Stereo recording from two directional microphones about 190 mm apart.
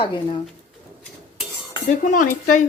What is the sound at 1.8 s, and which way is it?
Dishes, 45° left (ahead or behind).